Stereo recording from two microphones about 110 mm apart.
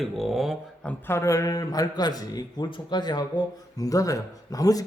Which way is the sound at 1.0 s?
25° left (ahead or behind).